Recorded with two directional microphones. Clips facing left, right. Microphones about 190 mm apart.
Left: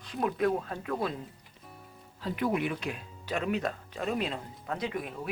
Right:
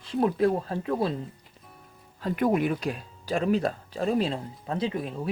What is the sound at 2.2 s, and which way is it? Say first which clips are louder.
Speech: right 5 dB; 45° right (ahead or behind).